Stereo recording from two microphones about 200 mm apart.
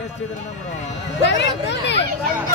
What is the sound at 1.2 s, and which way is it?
Speech, 60° left (ahead or behind).